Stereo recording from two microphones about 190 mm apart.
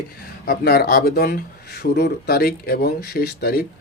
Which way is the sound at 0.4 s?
55° left (ahead or behind).